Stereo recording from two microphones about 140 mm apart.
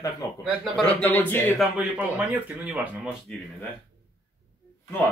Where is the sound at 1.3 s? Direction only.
15° left (ahead or behind).